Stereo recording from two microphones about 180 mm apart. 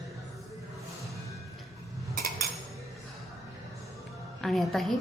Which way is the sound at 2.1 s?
55° right (ahead or behind).